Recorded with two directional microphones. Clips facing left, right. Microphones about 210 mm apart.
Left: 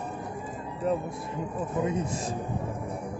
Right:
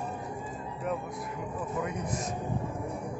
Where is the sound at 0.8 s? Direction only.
30° left (ahead or behind).